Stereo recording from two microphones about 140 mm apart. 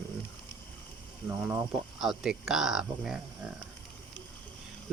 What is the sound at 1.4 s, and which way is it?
Speech, 15° right (ahead or behind).